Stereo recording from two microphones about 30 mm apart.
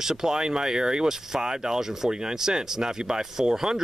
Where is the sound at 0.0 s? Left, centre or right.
Centre.